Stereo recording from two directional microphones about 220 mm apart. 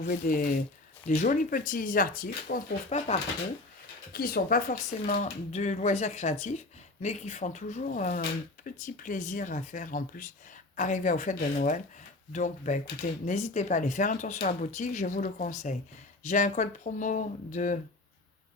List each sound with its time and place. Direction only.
0.0 s speech: 40° left (ahead or behind)